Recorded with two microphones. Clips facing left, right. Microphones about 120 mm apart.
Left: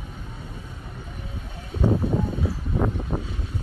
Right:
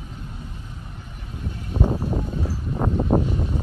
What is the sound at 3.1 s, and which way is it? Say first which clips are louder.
Vehicle: right 9 dB; 45° right (ahead or behind).